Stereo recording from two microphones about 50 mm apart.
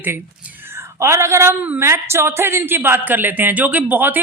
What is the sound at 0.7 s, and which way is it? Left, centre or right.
A woman's voice, right.